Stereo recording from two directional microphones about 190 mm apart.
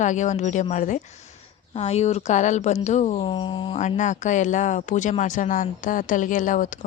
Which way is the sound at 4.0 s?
40° left (ahead or behind).